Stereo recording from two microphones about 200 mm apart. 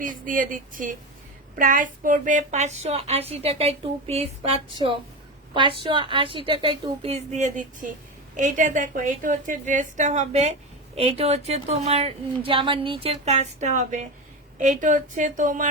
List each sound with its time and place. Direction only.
0.3 s a woman's voice: 40° right (ahead or behind)